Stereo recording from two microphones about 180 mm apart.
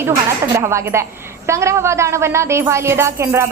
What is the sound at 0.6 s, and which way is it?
A woman's voice, 15° right (ahead or behind).